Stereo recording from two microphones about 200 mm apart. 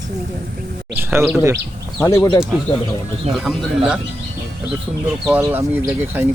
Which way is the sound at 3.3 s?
Centre (ahead or behind).